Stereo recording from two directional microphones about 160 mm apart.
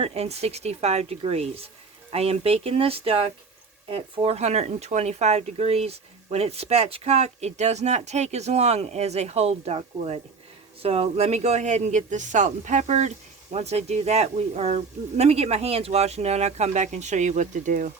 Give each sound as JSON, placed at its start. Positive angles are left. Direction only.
{"t": 0.0, "sound": "speech", "side_deg": -40}